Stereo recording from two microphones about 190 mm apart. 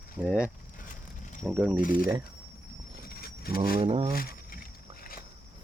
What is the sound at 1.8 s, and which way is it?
Speech, 45° left (ahead or behind).